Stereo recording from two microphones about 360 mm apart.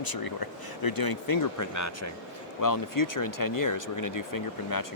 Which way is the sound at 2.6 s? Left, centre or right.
Left.